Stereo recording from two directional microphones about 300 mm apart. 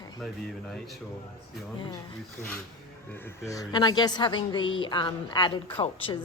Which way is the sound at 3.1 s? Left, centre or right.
Centre.